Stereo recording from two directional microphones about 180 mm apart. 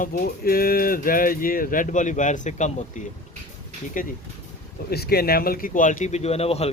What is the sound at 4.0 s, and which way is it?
Speech, 50° left (ahead or behind).